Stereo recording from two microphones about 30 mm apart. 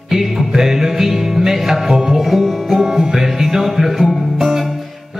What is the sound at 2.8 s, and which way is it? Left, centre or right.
Music, centre.